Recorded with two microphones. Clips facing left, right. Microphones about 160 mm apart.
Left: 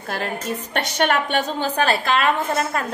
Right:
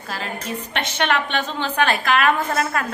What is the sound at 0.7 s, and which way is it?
A woman's voice, 40° left (ahead or behind).